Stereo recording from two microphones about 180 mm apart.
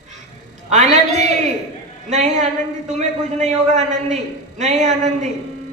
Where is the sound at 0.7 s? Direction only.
40° right (ahead or behind).